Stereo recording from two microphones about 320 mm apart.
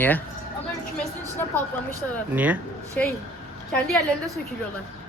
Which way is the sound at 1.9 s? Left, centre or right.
Centre.